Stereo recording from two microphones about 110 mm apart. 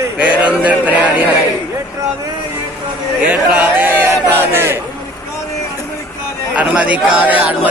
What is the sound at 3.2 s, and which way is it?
Speech, 10° right (ahead or behind).